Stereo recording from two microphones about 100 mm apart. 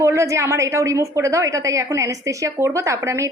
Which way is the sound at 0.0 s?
30° right (ahead or behind).